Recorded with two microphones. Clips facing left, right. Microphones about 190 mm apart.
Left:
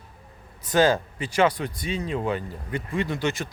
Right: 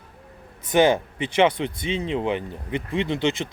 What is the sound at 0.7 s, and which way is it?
Speech, 20° right (ahead or behind).